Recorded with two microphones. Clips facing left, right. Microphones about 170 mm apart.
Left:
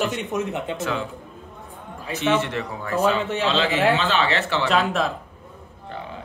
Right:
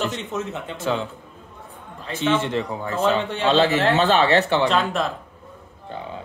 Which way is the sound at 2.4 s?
25° right (ahead or behind).